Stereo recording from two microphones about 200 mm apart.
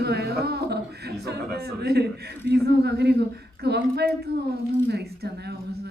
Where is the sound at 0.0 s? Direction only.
55° right (ahead or behind).